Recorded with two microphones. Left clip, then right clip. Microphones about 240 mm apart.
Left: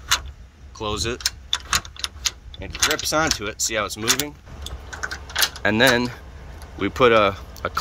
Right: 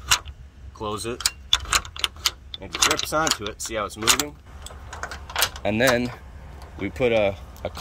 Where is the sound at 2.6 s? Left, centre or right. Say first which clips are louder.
Even; centre.